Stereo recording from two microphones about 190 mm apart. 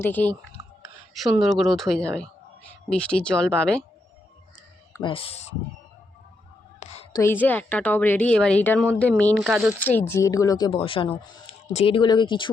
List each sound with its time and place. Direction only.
0.0 s a woman's voice: 10° left (ahead or behind)
5.0 s speech: 30° left (ahead or behind)
6.7 s whispering: 30° left (ahead or behind)
7.2 s a woman's voice: 10° left (ahead or behind)
9.8 s a woman's voice: 10° left (ahead or behind)